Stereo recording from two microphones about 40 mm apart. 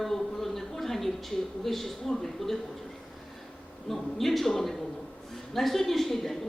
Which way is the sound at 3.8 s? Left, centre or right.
Centre.